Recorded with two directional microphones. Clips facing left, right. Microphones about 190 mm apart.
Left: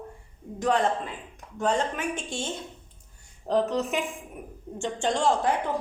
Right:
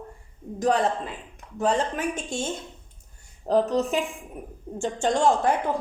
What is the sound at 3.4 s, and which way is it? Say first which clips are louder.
A woman's voice: right 3 dB; 40° right (ahead or behind).